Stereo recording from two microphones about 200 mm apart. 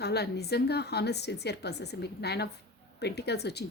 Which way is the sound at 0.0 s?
55° left (ahead or behind).